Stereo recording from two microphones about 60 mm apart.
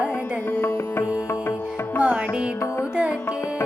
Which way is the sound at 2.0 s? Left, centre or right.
Centre.